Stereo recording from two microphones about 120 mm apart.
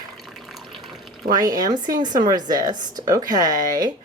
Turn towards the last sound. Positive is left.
turn(degrees=-35)  # may be behind; listen again after turning